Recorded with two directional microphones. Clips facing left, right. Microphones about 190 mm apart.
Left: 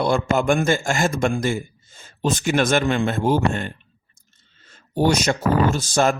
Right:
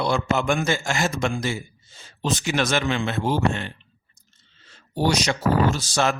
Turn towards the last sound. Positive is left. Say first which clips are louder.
# left 3 dB
turn(degrees=50)  # may be behind; listen again after turning